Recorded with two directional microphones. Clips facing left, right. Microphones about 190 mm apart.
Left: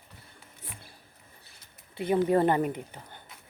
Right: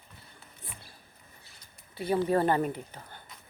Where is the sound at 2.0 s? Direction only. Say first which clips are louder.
Left 2 dB; 20° left (ahead or behind).